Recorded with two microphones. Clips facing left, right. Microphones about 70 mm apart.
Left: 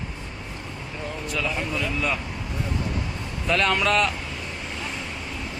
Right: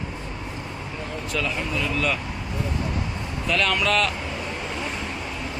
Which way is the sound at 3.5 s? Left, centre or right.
Left.